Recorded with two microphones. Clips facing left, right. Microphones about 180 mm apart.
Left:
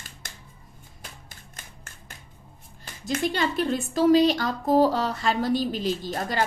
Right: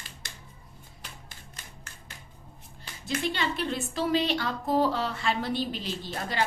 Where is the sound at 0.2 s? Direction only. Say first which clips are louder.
Left 3 dB; 50° left (ahead or behind).